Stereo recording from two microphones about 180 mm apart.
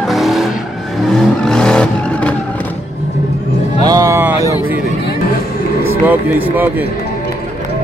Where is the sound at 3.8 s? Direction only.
20° right (ahead or behind).